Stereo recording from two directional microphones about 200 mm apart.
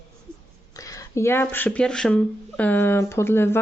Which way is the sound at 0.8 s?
15° left (ahead or behind).